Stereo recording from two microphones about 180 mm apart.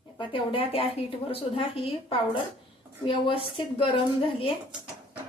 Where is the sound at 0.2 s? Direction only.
30° left (ahead or behind).